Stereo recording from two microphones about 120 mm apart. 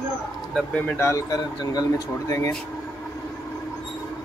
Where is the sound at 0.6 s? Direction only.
10° left (ahead or behind).